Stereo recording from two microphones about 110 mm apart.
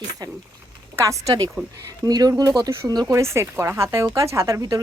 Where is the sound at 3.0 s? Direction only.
25° right (ahead or behind).